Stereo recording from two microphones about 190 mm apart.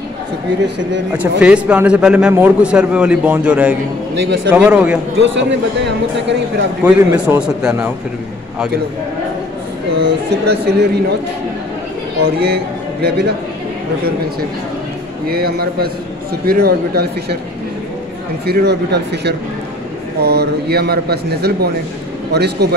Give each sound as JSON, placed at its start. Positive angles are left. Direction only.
{"t": 1.4, "sound": "a man's voice", "side_deg": -5}
{"t": 5.2, "sound": "speech", "side_deg": -75}
{"t": 6.8, "sound": "a man's voice", "side_deg": -10}
{"t": 9.9, "sound": "speech", "side_deg": -60}
{"t": 12.2, "sound": "speech", "side_deg": -60}
{"t": 15.2, "sound": "speech", "side_deg": -55}
{"t": 18.4, "sound": "speech", "side_deg": -60}